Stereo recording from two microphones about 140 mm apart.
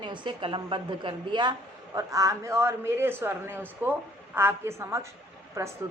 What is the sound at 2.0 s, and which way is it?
A woman's voice, 25° right (ahead or behind).